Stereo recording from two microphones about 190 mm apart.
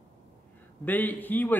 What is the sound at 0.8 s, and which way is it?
Speech, 10° left (ahead or behind).